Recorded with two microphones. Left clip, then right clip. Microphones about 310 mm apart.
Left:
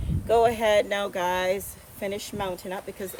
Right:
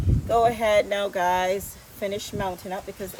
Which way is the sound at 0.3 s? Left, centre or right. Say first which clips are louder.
Even; centre.